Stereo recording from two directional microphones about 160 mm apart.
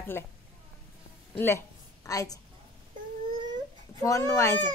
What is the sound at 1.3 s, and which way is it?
A woman's voice, 15° left (ahead or behind).